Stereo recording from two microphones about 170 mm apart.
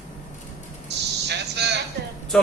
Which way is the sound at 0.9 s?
80° right.